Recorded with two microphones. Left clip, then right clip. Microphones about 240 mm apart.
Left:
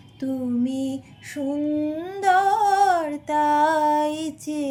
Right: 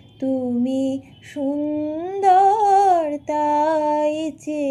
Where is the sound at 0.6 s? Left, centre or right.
Left.